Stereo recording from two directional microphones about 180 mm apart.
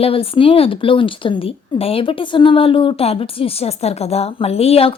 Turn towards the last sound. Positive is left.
turn(degrees=35)  # may be behind; listen again after turning